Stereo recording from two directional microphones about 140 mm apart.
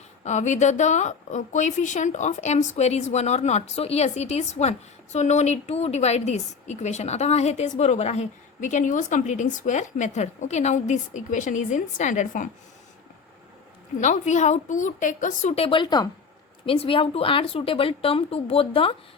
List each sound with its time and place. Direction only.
0.3 s a woman's voice: 55° left (ahead or behind)
14.0 s a woman's voice: 60° left (ahead or behind); by 18.9 s 40° left (ahead or behind)